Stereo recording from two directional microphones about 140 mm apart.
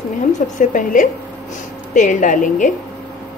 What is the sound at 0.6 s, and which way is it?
A woman's voice, 70° left (ahead or behind).